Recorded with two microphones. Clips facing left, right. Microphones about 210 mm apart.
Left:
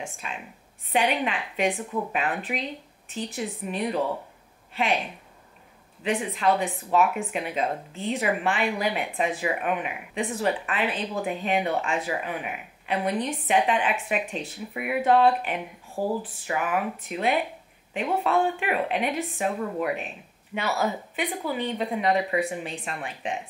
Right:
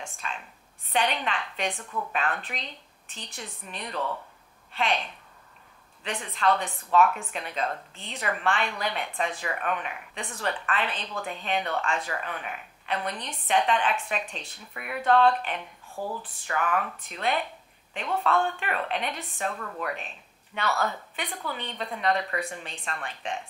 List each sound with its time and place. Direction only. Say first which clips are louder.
0.0 s speech: left 2 dB; 10° left (ahead or behind)
15.9 s speech: left 6 dB; 35° left (ahead or behind)
16.2 s speech: left 2 dB; 10° left (ahead or behind)